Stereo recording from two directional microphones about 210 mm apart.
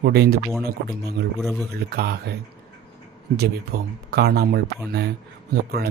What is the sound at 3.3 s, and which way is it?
Speech, 50° right (ahead or behind).